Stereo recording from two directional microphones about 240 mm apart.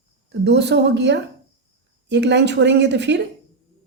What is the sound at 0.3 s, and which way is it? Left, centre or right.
A woman's voice, right.